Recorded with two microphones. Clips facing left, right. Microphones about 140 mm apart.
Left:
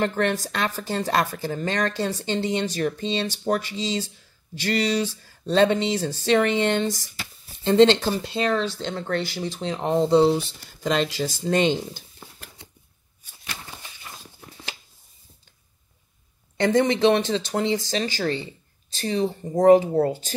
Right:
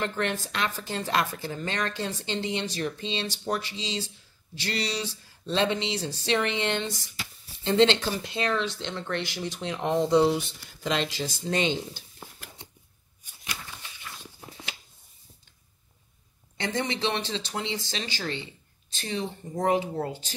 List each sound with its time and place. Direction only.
0.0 s a woman's voice: 45° left (ahead or behind)
12.2 s a sound: 5° right (ahead or behind)
16.5 s a woman's voice: 50° left (ahead or behind)